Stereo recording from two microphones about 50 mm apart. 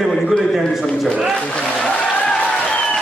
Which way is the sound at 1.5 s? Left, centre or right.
Left.